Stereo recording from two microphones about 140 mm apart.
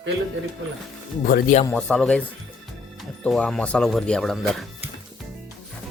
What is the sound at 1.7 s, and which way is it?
Speech, 5° left (ahead or behind).